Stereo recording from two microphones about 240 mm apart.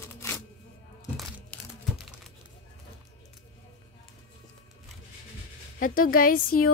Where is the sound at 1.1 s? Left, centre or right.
Centre.